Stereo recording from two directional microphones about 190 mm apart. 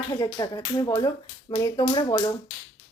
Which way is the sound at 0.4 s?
20° left (ahead or behind).